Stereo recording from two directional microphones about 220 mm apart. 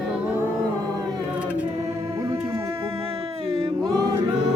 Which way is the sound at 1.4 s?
5° right (ahead or behind).